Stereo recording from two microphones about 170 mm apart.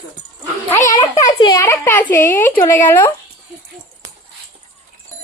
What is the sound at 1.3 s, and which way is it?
A woman's voice, 25° left (ahead or behind).